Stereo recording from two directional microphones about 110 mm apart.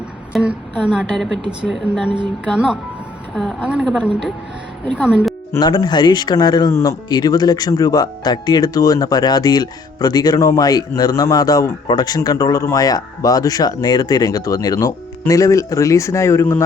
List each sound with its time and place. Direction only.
0.3 s a woman's voice: 5° right (ahead or behind)
5.0 s speech: 5° right (ahead or behind)
5.5 s speech: 40° left (ahead or behind)